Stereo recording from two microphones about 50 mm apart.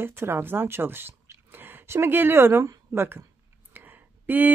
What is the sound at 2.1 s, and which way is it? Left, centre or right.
A woman's voice, right.